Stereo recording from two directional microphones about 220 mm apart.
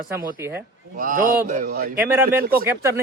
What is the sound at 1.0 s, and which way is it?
A man's voice, 40° right (ahead or behind).